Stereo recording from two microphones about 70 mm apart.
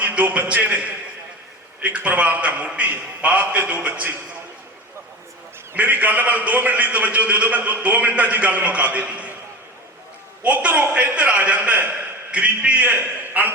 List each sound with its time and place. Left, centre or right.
0.0 s a man's voice: centre
5.7 s a man's voice: right
10.4 s a man's voice: centre